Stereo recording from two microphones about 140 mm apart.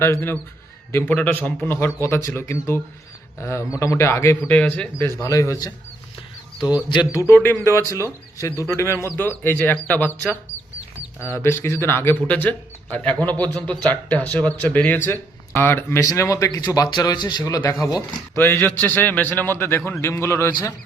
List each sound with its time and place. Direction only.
0.0 s speech: 15° left (ahead or behind)
6.9 s speech: 25° left (ahead or behind); by 10.1 s 10° left (ahead or behind)
11.2 s speech: 15° left (ahead or behind)